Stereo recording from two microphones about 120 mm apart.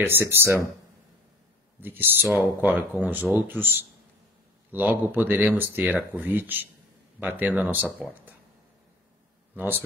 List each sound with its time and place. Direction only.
0.0 s speech: 20° right (ahead or behind)
1.8 s speech: 15° right (ahead or behind)
4.7 s speech: 15° right (ahead or behind)
9.6 s speech: 15° right (ahead or behind)